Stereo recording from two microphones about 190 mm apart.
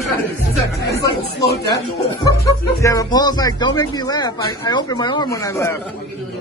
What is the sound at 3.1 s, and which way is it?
Speech, 20° left (ahead or behind).